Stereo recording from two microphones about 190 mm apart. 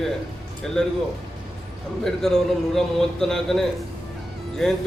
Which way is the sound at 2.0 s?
Centre (ahead or behind).